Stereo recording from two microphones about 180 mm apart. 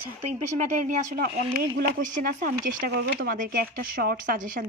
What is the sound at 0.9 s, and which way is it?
A woman's voice, 45° right (ahead or behind).